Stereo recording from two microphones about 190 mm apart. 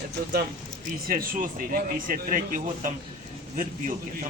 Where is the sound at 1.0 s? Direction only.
50° right (ahead or behind).